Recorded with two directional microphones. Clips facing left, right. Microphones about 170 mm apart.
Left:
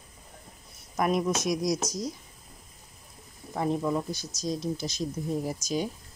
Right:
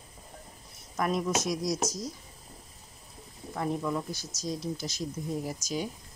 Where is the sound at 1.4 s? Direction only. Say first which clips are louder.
Left 3 dB; 15° left (ahead or behind).